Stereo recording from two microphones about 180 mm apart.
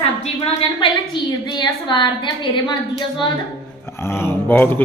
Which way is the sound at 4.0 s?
15° left (ahead or behind).